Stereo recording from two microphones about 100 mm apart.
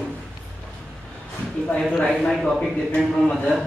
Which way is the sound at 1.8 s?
5° left (ahead or behind).